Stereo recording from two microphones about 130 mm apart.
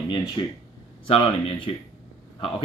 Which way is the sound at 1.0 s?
45° left (ahead or behind).